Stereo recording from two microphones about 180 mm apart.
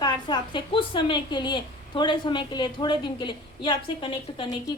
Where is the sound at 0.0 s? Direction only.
25° left (ahead or behind).